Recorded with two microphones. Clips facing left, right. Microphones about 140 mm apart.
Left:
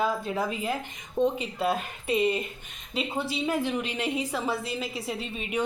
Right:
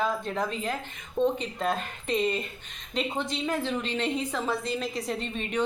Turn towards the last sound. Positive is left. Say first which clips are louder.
# right 1 dB
turn(degrees=10)  # may be behind; listen again after turning